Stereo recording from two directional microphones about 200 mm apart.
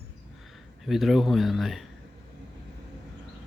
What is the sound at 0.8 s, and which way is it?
Speech, centre (ahead or behind).